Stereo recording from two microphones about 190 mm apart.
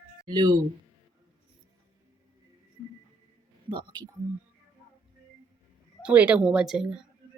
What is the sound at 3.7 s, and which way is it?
Speech, 20° right (ahead or behind).